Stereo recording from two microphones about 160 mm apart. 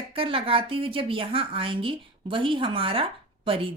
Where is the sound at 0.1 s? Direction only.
35° right (ahead or behind).